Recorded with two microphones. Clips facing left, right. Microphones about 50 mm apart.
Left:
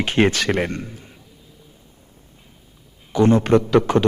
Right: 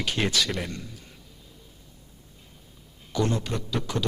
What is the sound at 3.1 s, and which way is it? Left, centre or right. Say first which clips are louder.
Speech: left 11 dB; left.